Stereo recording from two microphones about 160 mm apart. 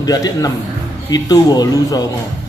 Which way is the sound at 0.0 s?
25° left (ahead or behind).